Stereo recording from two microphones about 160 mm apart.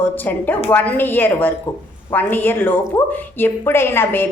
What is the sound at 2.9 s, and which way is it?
A woman's voice, 25° left (ahead or behind).